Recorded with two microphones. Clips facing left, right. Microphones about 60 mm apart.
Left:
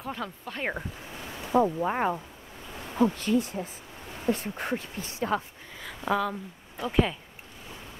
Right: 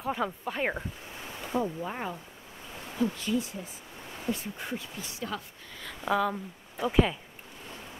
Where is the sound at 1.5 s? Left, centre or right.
Left.